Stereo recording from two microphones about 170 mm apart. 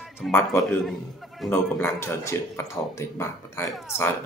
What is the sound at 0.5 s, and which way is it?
Speech, centre (ahead or behind).